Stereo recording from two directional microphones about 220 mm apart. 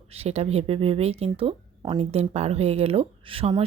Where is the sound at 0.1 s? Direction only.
30° right (ahead or behind).